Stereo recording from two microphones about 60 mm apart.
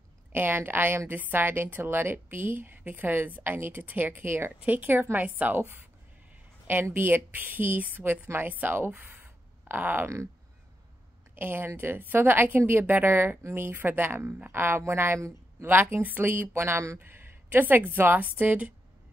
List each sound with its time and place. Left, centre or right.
0.3 s a woman's voice: right
4.5 s a woman's voice: right
11.3 s a woman's voice: right
13.4 s speech: right
13.7 s a woman's voice: right
15.6 s a woman's voice: right